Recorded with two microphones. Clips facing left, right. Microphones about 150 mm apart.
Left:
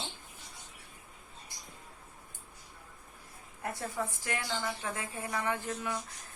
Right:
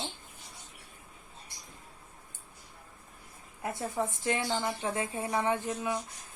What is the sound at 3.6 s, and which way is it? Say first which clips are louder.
A woman's voice: right 3 dB; 20° right (ahead or behind).